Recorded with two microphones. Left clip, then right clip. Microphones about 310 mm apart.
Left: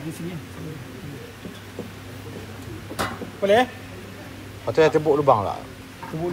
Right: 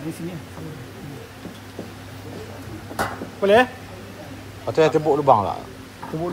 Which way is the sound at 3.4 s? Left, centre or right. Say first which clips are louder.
Right 3 dB; right.